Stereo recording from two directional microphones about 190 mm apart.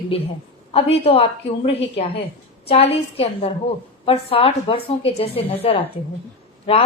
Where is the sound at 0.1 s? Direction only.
30° left (ahead or behind).